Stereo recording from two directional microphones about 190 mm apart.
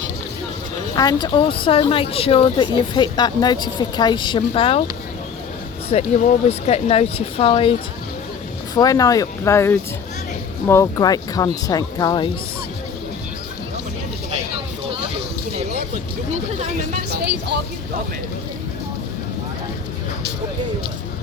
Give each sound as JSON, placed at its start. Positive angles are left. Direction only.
{"t": 0.9, "sound": "speech", "side_deg": 20}
{"t": 5.9, "sound": "speech", "side_deg": 35}
{"t": 16.3, "sound": "speech", "side_deg": -40}
{"t": 17.1, "sound": "speech", "side_deg": -60}